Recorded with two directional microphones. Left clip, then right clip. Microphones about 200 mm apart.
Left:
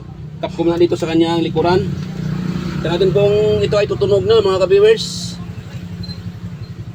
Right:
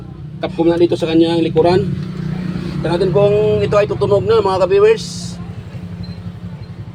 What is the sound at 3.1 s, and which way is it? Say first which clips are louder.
Speech: right 2 dB; 10° right (ahead or behind).